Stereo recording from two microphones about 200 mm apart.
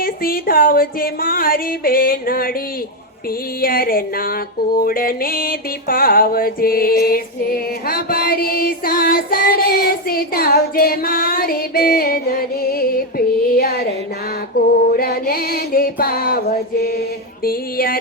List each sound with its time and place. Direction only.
0.0 s music: 45° left (ahead or behind)
3.6 s music: 45° left (ahead or behind)